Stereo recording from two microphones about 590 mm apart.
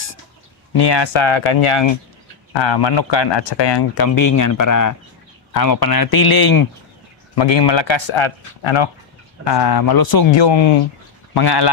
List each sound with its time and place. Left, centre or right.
0.7 s speech: left
7.3 s speech: left
9.4 s speech: left